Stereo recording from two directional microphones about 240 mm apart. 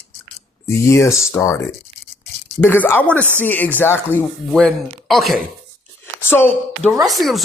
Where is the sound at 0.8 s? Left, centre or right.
Centre.